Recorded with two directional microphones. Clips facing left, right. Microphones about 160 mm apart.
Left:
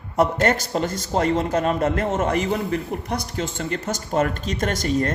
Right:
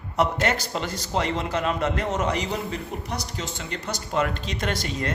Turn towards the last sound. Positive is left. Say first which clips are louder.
# left 6 dB
turn(degrees=45)  # may be behind; listen again after turning